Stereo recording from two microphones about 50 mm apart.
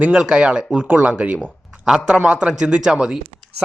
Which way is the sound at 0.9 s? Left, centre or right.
Right.